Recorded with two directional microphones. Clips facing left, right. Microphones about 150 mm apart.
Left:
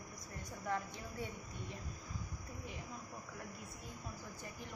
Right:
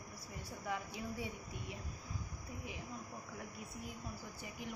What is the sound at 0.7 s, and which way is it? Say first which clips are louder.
Speech: left 1 dB; 5° right (ahead or behind).